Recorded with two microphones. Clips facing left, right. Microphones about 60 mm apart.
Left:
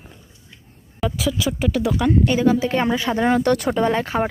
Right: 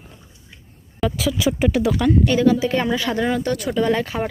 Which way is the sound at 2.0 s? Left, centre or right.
Centre.